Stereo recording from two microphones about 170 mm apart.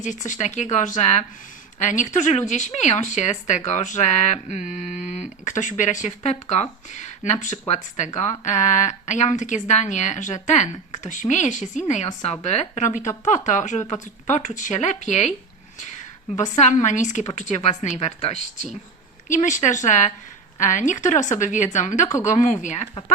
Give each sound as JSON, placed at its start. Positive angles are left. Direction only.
{"t": 0.0, "sound": "a woman's voice", "side_deg": 45}
{"t": 15.8, "sound": "a sound", "side_deg": 45}
{"t": 16.4, "sound": "a woman's voice", "side_deg": 45}